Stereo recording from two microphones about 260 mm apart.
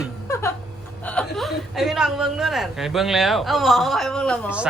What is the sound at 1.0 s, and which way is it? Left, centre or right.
A woman's voice, centre.